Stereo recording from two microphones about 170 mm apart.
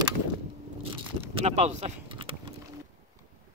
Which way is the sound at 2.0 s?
30° right (ahead or behind).